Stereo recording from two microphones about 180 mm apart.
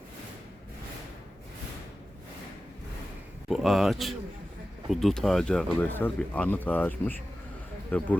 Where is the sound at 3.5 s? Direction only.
Centre (ahead or behind).